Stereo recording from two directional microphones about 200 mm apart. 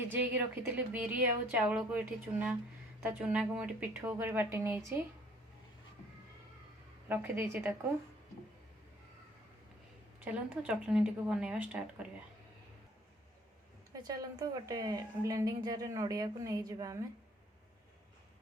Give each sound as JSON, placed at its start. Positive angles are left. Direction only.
{"t": 0.0, "sound": "a woman's voice", "side_deg": -10}
{"t": 3.0, "sound": "a woman's voice", "side_deg": -10}
{"t": 7.1, "sound": "a woman's voice", "side_deg": -10}
{"t": 10.2, "sound": "a woman's voice", "side_deg": -5}
{"t": 13.9, "sound": "a woman's voice", "side_deg": -20}